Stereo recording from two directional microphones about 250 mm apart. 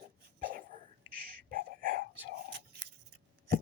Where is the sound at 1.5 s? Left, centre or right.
Right.